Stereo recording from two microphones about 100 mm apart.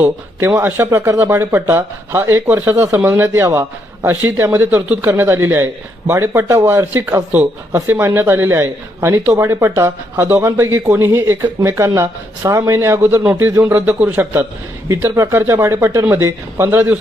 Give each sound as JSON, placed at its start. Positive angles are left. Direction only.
{"t": 0.0, "sound": "speech", "side_deg": -25}
{"t": 6.9, "sound": "speech", "side_deg": -20}